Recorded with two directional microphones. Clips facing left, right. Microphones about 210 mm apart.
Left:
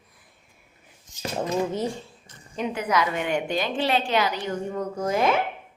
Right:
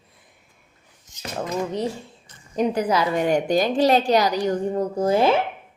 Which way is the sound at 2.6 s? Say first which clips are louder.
Right 4 dB; 35° right (ahead or behind).